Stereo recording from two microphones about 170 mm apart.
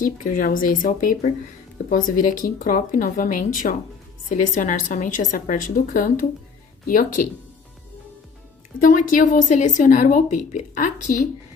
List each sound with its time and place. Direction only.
0.0 s a woman's voice: 55° left (ahead or behind)
8.8 s a woman's voice: 50° left (ahead or behind)